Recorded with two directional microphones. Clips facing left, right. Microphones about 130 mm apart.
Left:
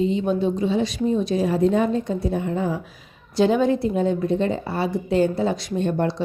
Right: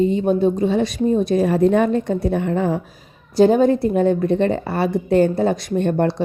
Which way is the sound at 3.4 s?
45° right (ahead or behind).